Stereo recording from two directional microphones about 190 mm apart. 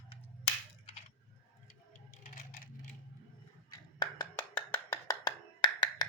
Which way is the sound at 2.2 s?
45° left (ahead or behind).